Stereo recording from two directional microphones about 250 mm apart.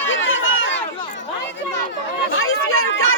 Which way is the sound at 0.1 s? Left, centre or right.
Left.